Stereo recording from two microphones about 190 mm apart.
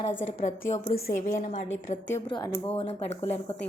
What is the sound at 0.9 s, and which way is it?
A woman's voice, 50° left (ahead or behind).